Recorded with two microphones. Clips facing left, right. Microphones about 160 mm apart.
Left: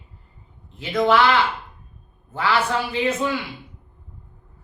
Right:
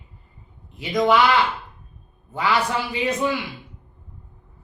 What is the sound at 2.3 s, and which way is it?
A woman's voice, 15° right (ahead or behind).